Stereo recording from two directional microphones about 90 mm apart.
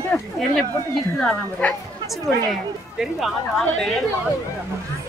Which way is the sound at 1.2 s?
15° left (ahead or behind).